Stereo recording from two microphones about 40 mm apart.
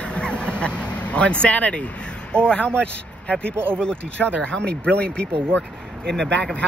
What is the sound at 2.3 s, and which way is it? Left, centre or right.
Speech, left.